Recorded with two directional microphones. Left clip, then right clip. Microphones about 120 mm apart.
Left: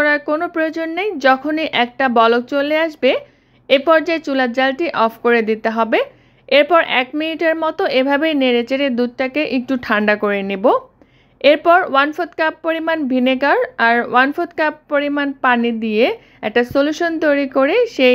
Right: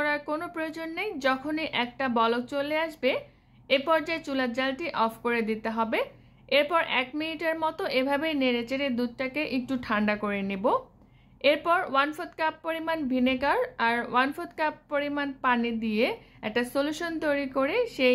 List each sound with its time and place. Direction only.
0.0 s a woman's voice: 40° left (ahead or behind)